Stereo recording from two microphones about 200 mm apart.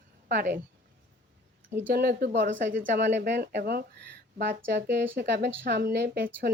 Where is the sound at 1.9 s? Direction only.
50° right (ahead or behind).